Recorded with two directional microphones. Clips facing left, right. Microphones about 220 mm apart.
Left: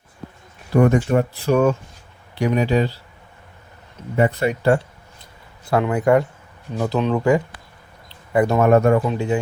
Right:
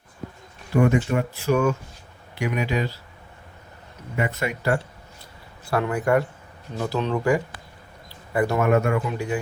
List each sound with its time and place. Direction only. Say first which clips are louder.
0.7 s speech: left 4 dB; 40° left (ahead or behind)
4.2 s speech: left 7 dB; 35° left (ahead or behind)
8.6 s speech: left 8 dB; 40° left (ahead or behind)
9.1 s speech: left 5 dB; 25° left (ahead or behind)